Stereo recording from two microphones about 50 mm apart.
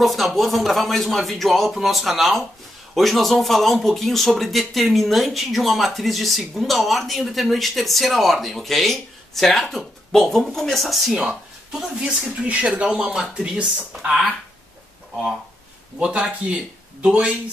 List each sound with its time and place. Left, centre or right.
0.0 s speech: centre
11.9 s speech: centre
12.4 s speech: right
13.0 s speech: centre
16.0 s speech: right